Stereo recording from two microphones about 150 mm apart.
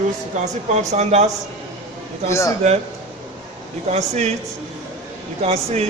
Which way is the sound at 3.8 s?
45° right (ahead or behind).